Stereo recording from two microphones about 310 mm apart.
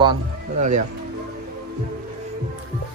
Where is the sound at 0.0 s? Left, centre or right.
Centre.